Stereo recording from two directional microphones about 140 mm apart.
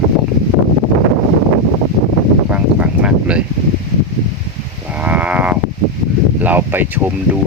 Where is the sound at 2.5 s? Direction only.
10° right (ahead or behind).